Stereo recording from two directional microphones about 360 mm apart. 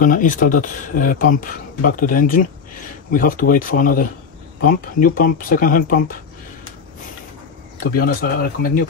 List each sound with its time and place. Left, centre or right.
0.0 s speech: left
7.8 s speech: left